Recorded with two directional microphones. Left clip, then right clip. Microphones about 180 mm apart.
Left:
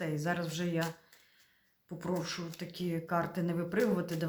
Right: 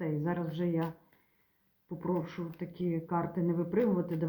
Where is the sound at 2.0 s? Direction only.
10° left (ahead or behind).